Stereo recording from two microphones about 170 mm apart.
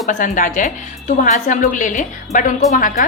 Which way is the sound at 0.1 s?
50° left (ahead or behind).